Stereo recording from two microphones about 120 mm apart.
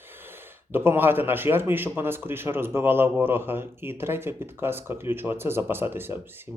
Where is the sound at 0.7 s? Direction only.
15° right (ahead or behind).